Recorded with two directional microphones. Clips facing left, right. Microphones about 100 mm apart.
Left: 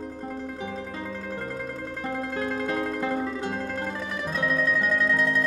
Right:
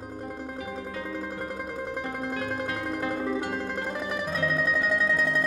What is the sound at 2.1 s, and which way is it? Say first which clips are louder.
Music: left 5 dB; 15° right (ahead or behind).